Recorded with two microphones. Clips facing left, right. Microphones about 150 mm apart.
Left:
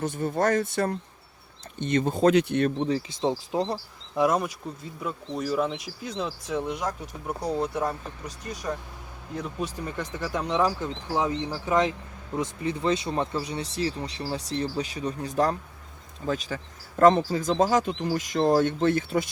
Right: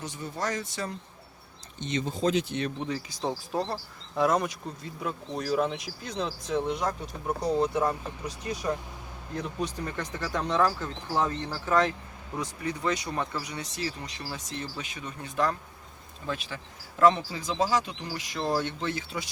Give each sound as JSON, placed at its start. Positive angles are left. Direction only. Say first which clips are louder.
{"t": 0.0, "sound": "speech", "louder": "left 8 dB", "side_deg": 55}
{"t": 2.7, "sound": "speech", "louder": "left 6 dB", "side_deg": 30}
{"t": 4.1, "sound": "speech", "louder": "left 2 dB", "side_deg": 10}
{"t": 7.7, "sound": "speech", "louder": "right 1 dB", "side_deg": -5}